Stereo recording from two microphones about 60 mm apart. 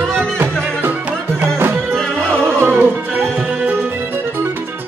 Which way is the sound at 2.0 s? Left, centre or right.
Centre.